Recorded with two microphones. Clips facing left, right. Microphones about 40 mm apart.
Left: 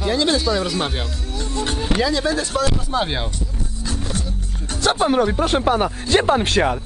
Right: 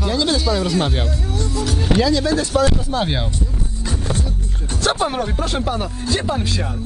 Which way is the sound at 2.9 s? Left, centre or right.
Centre.